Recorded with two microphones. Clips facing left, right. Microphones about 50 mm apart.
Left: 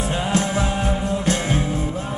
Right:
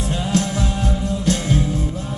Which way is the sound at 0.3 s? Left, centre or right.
Centre.